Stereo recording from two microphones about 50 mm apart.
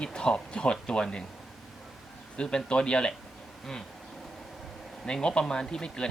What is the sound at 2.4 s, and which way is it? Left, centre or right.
Speech, centre.